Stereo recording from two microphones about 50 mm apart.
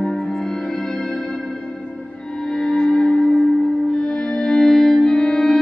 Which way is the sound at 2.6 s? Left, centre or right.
Centre.